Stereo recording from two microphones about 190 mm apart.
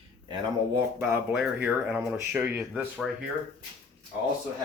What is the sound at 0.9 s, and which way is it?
Speech, 5° right (ahead or behind).